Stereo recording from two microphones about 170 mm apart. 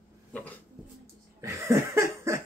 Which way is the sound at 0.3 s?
10° left (ahead or behind).